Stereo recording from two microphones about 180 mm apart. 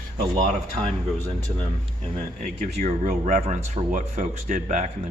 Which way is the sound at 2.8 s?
40° right (ahead or behind).